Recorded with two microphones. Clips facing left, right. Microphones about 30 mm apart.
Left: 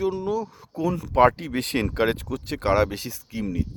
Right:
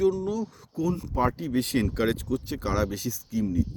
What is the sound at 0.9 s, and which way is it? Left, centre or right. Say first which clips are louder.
Speech: left 9 dB; left.